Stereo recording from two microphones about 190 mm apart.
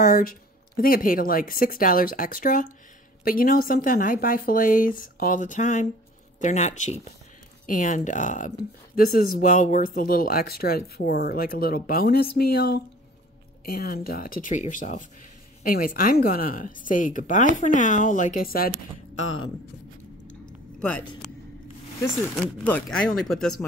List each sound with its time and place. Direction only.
0.0 s speech: 45° left (ahead or behind)
22.0 s speech: 10° left (ahead or behind)